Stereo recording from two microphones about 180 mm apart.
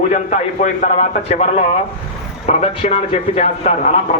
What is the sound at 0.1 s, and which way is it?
Speech, 40° left (ahead or behind).